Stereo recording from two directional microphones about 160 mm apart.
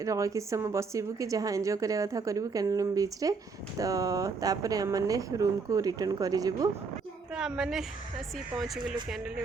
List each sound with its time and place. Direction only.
0.0 s a woman's voice: 20° right (ahead or behind)
7.3 s a woman's voice: 5° right (ahead or behind)